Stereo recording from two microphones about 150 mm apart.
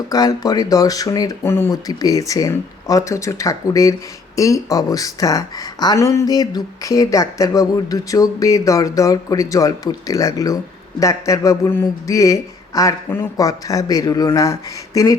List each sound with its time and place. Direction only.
0.1 s speech: 25° left (ahead or behind)